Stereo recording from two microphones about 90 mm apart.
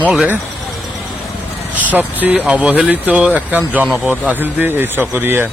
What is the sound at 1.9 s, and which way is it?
Speech, 20° right (ahead or behind).